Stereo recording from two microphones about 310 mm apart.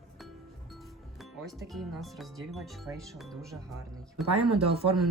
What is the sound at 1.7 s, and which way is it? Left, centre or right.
Speech, centre.